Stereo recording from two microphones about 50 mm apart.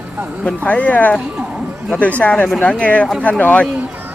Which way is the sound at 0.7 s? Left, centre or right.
Left.